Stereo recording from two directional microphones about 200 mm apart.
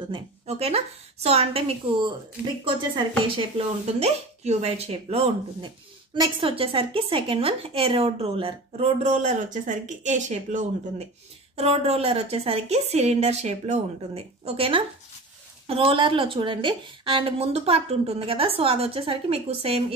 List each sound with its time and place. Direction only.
0.1 s speech: 30° right (ahead or behind)
3.3 s a woman's voice: 30° right (ahead or behind)